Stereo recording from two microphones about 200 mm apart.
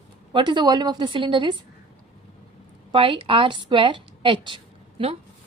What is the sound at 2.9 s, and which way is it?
A woman's voice, 25° right (ahead or behind).